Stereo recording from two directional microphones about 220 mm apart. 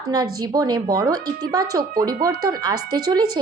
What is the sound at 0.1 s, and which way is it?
A woman's voice, 15° right (ahead or behind).